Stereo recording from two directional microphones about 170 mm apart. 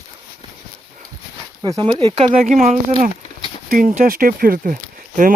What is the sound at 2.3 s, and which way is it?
Speech, 45° right (ahead or behind).